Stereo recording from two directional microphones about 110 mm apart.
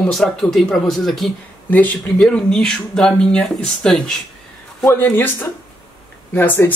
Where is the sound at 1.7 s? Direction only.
15° left (ahead or behind).